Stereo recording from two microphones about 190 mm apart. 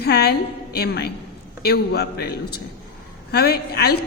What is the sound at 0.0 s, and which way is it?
A woman's voice, 60° left (ahead or behind).